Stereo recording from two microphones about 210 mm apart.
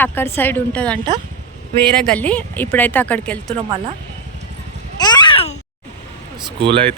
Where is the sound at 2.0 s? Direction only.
5° left (ahead or behind).